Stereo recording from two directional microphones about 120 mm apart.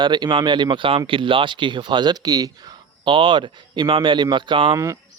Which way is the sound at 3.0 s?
45° right (ahead or behind).